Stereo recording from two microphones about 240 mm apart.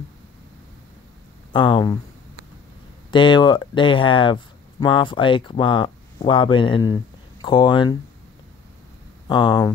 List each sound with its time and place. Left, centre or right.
1.5 s speech: centre
3.1 s speech: centre
9.3 s speech: centre